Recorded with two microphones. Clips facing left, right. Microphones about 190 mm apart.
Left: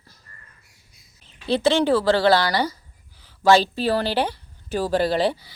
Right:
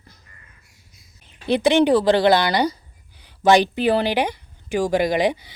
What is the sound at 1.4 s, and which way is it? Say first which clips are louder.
Speech: right 3 dB; 15° right (ahead or behind).